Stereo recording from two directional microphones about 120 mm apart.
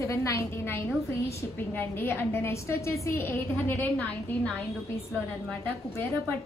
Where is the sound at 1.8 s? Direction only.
15° left (ahead or behind).